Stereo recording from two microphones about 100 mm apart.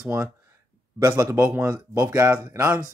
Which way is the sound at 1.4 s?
25° right (ahead or behind).